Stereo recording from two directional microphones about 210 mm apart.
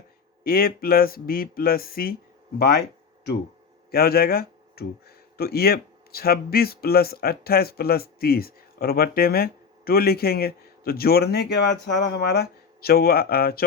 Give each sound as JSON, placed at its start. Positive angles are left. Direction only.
{"t": 0.4, "sound": "speech", "side_deg": 45}
{"t": 3.9, "sound": "speech", "side_deg": 45}